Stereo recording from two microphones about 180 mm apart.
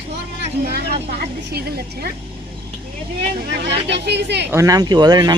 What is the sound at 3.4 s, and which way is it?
Speech, 65° right (ahead or behind).